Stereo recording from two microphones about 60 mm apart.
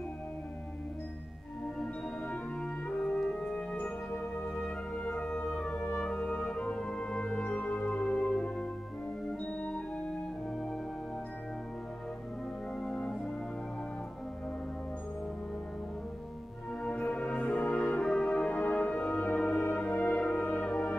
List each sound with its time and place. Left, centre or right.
1.8 s music: centre
3.0 s music: centre
3.7 s music: left
9.5 s organ: centre
12.8 s brass instrument: centre
16.8 s music: left